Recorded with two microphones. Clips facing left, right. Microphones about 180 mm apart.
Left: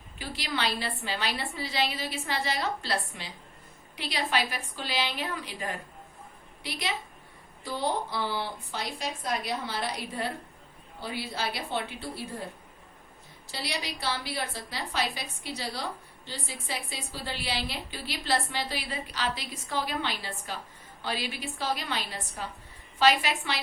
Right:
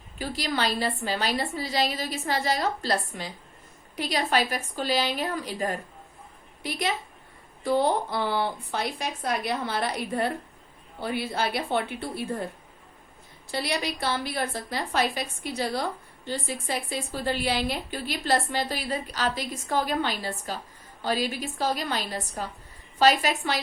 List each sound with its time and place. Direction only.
0.2 s a woman's voice: 40° right (ahead or behind)
13.5 s a woman's voice: 55° right (ahead or behind)